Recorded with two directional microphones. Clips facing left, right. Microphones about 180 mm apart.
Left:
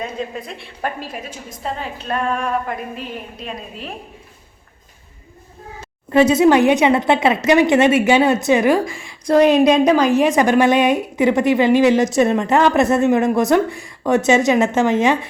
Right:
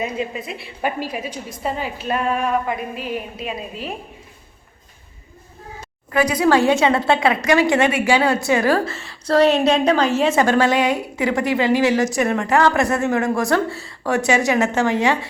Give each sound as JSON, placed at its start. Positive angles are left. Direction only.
{"t": 0.0, "sound": "a woman's voice", "side_deg": -5}
{"t": 6.1, "sound": "speech", "side_deg": 25}